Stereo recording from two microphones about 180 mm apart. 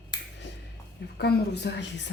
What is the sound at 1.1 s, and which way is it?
Speech, 65° left (ahead or behind).